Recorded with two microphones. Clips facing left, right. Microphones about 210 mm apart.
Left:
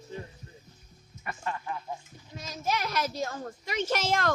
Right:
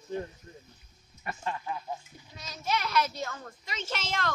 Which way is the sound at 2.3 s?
45° left (ahead or behind).